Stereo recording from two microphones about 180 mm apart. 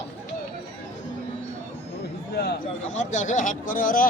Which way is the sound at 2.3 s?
65° left (ahead or behind).